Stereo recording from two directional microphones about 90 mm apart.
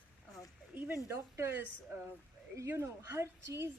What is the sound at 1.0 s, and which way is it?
A woman's voice, 25° right (ahead or behind).